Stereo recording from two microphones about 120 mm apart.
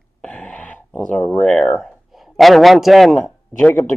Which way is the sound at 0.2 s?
10° left (ahead or behind).